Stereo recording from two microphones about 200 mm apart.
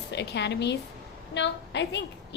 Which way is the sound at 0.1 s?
60° left (ahead or behind).